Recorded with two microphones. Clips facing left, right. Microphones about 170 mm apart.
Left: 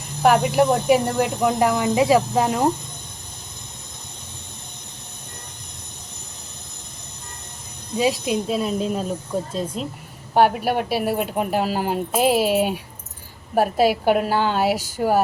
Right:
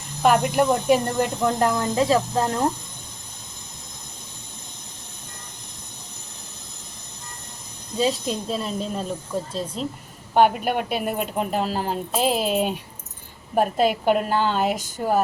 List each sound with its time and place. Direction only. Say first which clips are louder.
0.2 s speech: left 2 dB; 5° left (ahead or behind)
7.9 s speech: left 3 dB; 10° left (ahead or behind)